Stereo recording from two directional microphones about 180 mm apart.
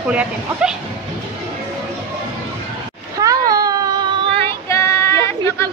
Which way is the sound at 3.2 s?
20° right (ahead or behind).